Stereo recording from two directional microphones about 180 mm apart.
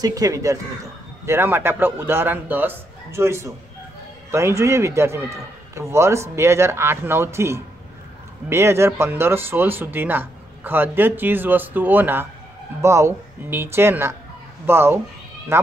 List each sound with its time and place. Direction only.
0.0 s speech: 20° right (ahead or behind)